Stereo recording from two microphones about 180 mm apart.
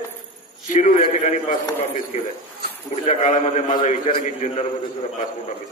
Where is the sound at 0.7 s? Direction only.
45° left (ahead or behind).